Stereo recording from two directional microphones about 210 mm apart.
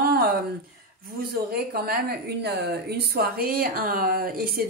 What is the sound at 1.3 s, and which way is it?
A woman's voice, 45° right (ahead or behind).